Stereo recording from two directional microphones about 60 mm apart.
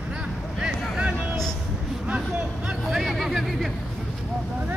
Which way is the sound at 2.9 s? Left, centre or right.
Centre.